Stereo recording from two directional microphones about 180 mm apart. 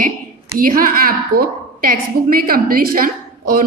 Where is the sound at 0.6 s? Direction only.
50° right (ahead or behind).